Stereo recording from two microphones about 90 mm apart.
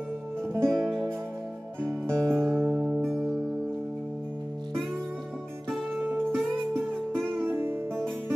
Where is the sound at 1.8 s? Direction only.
30° right (ahead or behind).